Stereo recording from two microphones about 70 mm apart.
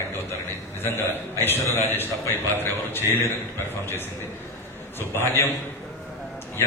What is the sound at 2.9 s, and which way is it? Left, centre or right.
Speech, left.